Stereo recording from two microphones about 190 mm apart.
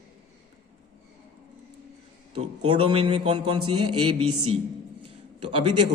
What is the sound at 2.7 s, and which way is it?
A man's voice, 25° right (ahead or behind).